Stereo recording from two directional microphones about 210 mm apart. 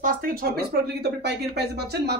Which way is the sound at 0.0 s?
45° right (ahead or behind).